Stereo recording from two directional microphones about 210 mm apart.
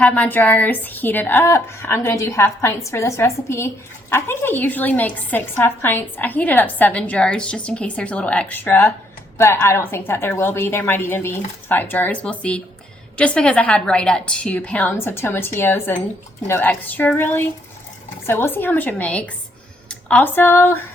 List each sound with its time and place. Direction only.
0.0 s a woman's voice: 5° left (ahead or behind)